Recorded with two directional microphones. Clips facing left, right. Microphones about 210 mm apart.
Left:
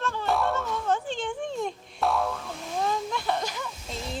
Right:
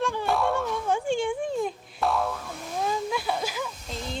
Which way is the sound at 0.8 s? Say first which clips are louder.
Right 3 dB; 10° right (ahead or behind).